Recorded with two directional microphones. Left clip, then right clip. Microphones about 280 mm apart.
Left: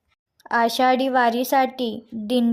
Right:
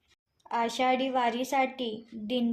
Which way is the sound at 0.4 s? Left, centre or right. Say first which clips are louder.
Left 9 dB; left.